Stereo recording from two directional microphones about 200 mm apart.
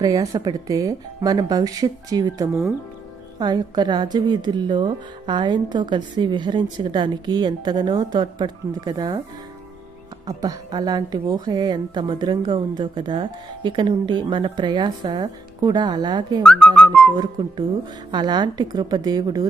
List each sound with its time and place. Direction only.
0.0 s a woman's voice: 20° right (ahead or behind)
10.2 s a woman's voice: 20° right (ahead or behind)
16.4 s speech: 5° left (ahead or behind)
18.1 s a woman's voice: 20° right (ahead or behind)